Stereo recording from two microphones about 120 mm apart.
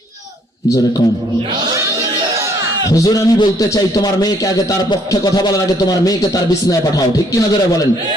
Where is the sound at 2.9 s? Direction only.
30° left (ahead or behind).